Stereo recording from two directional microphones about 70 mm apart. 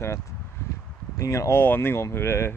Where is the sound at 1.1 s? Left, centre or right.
Left.